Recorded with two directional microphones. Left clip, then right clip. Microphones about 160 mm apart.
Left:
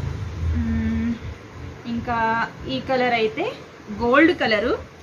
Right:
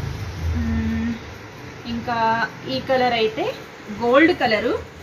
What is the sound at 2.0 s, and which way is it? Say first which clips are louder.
A woman's voice: right 2 dB; 20° left (ahead or behind).